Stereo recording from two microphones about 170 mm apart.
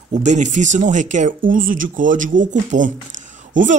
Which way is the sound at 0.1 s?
45° right (ahead or behind).